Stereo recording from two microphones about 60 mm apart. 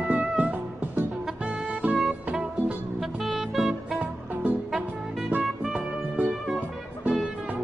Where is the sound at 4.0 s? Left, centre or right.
Right.